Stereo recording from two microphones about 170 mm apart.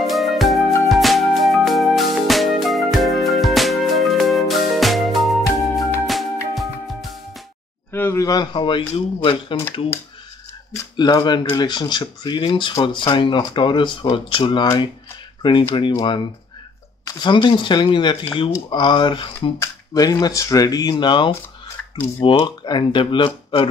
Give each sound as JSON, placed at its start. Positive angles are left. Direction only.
{"t": 0.0, "sound": "music", "side_deg": 0}
{"t": 7.9, "sound": "speech", "side_deg": 15}
{"t": 10.7, "sound": "speech", "side_deg": 25}